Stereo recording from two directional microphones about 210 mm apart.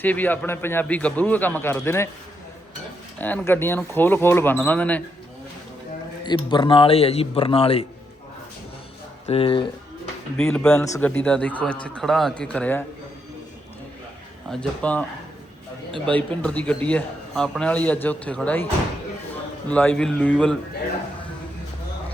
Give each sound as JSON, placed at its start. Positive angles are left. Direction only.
{"t": 0.0, "sound": "a man's voice", "side_deg": 10}
{"t": 3.2, "sound": "a man's voice", "side_deg": 10}
{"t": 6.2, "sound": "a man's voice", "side_deg": 20}
{"t": 9.2, "sound": "a man's voice", "side_deg": 25}
{"t": 10.3, "sound": "speech", "side_deg": 5}
{"t": 14.5, "sound": "speech", "side_deg": 5}
{"t": 16.0, "sound": "a man's voice", "side_deg": 5}